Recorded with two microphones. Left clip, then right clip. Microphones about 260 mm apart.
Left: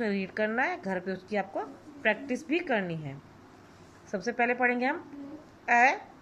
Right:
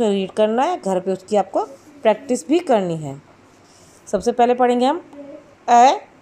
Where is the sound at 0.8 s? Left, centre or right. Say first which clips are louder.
Right 13 dB; centre.